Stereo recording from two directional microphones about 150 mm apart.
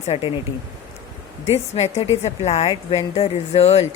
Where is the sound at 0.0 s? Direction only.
40° left (ahead or behind).